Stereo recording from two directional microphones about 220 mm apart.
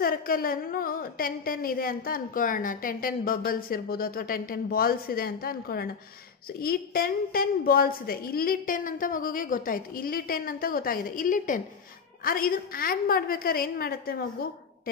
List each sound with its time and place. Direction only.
0.0 s a woman's voice: 40° left (ahead or behind)